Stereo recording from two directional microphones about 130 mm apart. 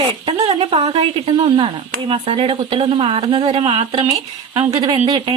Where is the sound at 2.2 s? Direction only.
50° right (ahead or behind).